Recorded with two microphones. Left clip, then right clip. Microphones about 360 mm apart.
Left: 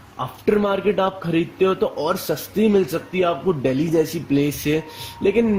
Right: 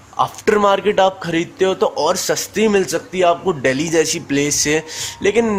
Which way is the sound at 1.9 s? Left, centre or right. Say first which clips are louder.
Right 5 dB; right.